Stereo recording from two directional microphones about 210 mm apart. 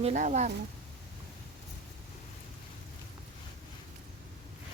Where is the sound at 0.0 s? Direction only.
35° right (ahead or behind).